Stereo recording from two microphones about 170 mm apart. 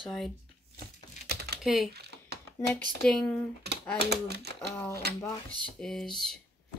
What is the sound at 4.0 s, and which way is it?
Speech, 75° right (ahead or behind).